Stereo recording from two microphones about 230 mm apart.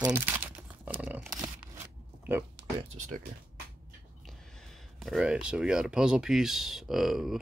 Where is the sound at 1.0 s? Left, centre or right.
Centre.